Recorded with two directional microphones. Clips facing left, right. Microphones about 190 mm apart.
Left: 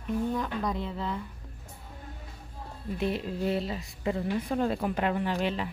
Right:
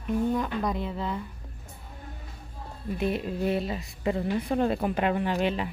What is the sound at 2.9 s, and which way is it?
A woman's voice, 10° right (ahead or behind).